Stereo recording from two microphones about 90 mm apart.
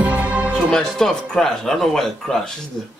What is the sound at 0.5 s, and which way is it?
Speech, 5° left (ahead or behind).